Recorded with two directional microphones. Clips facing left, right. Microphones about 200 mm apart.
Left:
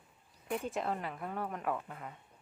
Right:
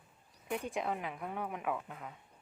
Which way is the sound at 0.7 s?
Centre (ahead or behind).